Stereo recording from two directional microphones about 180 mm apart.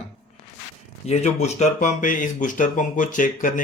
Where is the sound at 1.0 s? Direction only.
40° left (ahead or behind).